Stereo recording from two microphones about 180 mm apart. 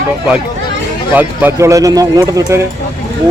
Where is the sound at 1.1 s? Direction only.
10° right (ahead or behind).